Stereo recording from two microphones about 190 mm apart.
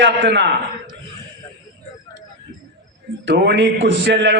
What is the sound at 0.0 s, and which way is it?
Speech, 70° right (ahead or behind).